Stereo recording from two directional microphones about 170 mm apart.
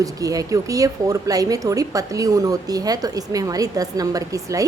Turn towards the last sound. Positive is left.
turn(degrees=-20)  # may be behind; listen again after turning